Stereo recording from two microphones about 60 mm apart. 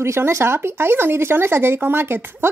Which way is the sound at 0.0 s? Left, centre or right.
Right.